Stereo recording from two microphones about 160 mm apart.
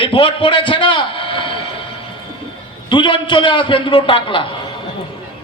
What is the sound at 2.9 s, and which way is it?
A man's voice, 30° left (ahead or behind).